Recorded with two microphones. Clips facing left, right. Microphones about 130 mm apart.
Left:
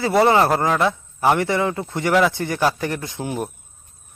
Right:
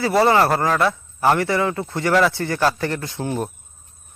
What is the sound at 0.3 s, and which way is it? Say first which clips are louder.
A man's voice: even; 15° left (ahead or behind).